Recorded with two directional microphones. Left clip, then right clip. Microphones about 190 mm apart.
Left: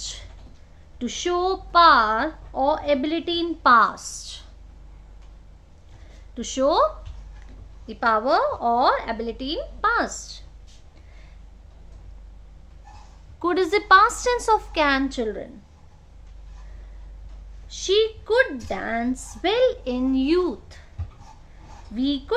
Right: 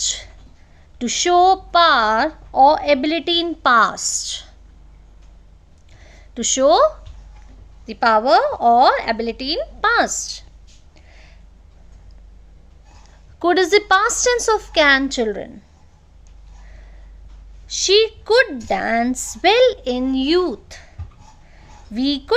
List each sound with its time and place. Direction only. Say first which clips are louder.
0.0 s a sound: right 11 dB; 40° right (ahead or behind)
0.9 s speech: right 10 dB; 45° right (ahead or behind)
6.3 s speech: right 6 dB; 40° right (ahead or behind)
7.9 s a woman's voice: right 6 dB; 45° right (ahead or behind)
13.4 s speech: right 7 dB; 30° right (ahead or behind)
17.7 s a woman's voice: right 6 dB; 45° right (ahead or behind)
21.9 s a woman's voice: right 6 dB; 45° right (ahead or behind)